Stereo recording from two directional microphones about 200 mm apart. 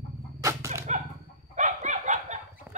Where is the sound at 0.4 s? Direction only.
15° right (ahead or behind).